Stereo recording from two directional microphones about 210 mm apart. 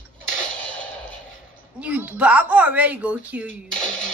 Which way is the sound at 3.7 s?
35° left (ahead or behind).